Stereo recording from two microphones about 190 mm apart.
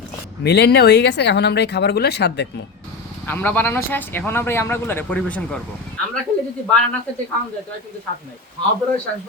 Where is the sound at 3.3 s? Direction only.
10° left (ahead or behind).